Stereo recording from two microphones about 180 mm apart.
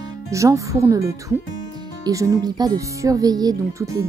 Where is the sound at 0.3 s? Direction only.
15° right (ahead or behind).